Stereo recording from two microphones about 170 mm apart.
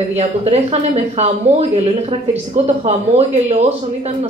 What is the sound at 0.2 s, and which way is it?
Speech, 40° right (ahead or behind).